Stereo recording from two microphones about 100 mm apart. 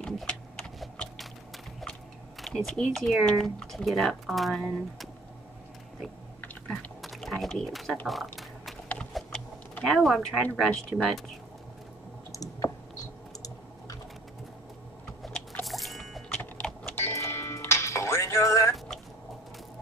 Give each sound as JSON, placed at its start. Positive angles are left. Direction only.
{"t": 0.0, "sound": "a sound", "side_deg": 5}
{"t": 2.4, "sound": "speech", "side_deg": 5}
{"t": 7.0, "sound": "a sound", "side_deg": 0}
{"t": 9.8, "sound": "speech", "side_deg": 0}
{"t": 10.5, "sound": "speech", "side_deg": 10}
{"t": 12.3, "sound": "typing", "side_deg": 35}
{"t": 15.2, "sound": "vehicle", "side_deg": 0}
{"t": 15.6, "sound": "music", "side_deg": 0}
{"t": 16.3, "sound": "typing", "side_deg": 10}
{"t": 16.9, "sound": "music", "side_deg": 25}